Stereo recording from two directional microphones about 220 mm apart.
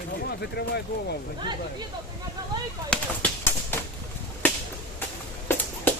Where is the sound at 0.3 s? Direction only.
50° left (ahead or behind).